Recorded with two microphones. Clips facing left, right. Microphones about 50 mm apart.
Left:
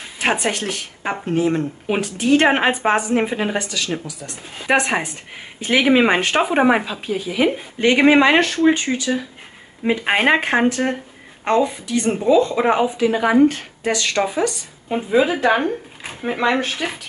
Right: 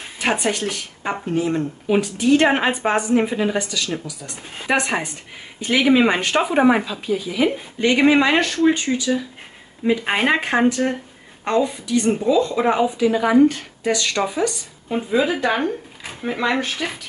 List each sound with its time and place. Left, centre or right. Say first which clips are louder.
0.2 s speech: left 1 dB; centre
0.5 s speech: even; left
1.2 s speech: left 3 dB; left
2.0 s speech: even; left
2.4 s speech: left 2 dB; left
3.5 s speech: even; left
3.9 s speech: left 2 dB; left
4.7 s a woman's voice: left 2 dB; centre
5.6 s speech: left 1 dB; left
8.9 s speech: right 1 dB; left
12.5 s speech: left 1 dB; left
15.1 s speech: left 3 dB; centre